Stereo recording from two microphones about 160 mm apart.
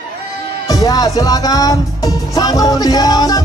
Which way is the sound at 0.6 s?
20° left (ahead or behind).